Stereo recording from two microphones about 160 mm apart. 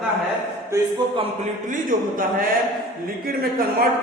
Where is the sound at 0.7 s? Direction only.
25° right (ahead or behind).